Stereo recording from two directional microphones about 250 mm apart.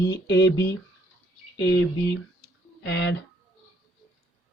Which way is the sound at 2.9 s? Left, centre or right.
Left.